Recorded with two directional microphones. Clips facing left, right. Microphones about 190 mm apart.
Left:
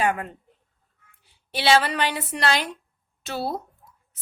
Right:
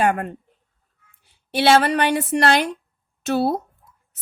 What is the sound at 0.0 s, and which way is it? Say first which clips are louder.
Speech: right 4 dB; 50° right (ahead or behind).